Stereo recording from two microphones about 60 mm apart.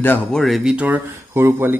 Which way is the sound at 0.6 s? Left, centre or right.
Centre.